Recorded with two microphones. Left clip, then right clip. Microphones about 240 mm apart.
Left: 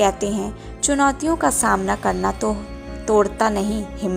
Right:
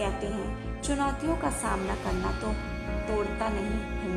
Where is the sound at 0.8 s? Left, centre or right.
Left.